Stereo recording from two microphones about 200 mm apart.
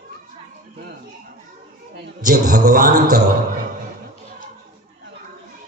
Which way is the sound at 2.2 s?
40° right (ahead or behind).